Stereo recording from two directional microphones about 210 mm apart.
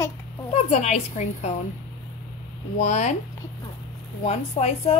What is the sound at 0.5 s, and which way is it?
A woman's voice, 30° left (ahead or behind).